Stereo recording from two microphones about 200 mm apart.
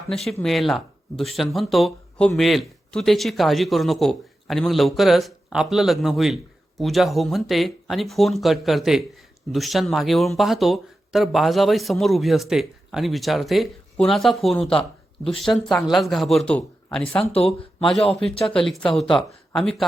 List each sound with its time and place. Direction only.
0.1 s speech: centre (ahead or behind)
17.3 s speech: 30° left (ahead or behind)
18.1 s speech: centre (ahead or behind)